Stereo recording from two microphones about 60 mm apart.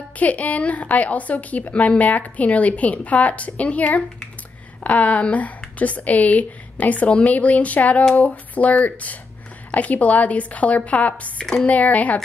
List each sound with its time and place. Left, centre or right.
0.2 s a woman's voice: left
8.0 s a woman's voice: centre